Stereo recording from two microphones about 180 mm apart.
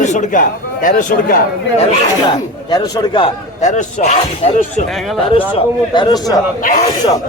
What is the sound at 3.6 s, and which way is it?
Speech, 40° left (ahead or behind).